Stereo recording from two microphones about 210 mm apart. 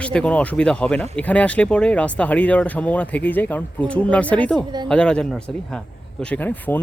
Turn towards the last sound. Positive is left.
turn(degrees=10)  # may be behind; listen again after turning